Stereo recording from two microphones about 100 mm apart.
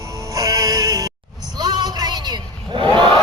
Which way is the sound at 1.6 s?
45° right (ahead or behind).